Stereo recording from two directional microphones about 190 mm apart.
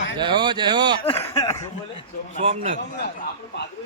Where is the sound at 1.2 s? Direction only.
15° left (ahead or behind).